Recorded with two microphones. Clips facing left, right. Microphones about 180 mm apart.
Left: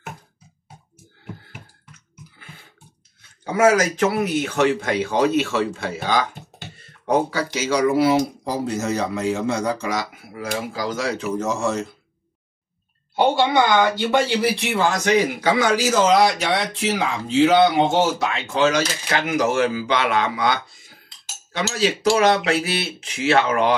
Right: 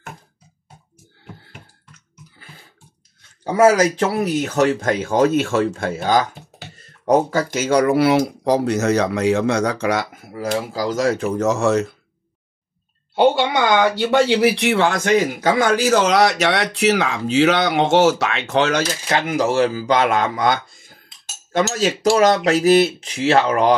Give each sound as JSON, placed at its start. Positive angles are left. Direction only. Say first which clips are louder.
{"t": 3.5, "sound": "speech", "louder": "right 3 dB", "side_deg": -35}
{"t": 10.3, "sound": "speech", "louder": "right 4 dB", "side_deg": -35}
{"t": 13.1, "sound": "a sound", "louder": "right 3 dB", "side_deg": -70}
{"t": 14.4, "sound": "speech", "louder": "right 4 dB", "side_deg": -80}
{"t": 19.0, "sound": "speech", "louder": "right 3 dB", "side_deg": -35}